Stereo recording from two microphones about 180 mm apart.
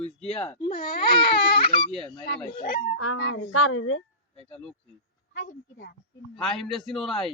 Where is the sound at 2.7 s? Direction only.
90° left.